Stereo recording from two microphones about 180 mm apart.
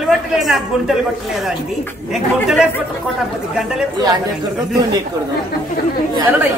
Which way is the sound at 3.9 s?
20° right (ahead or behind).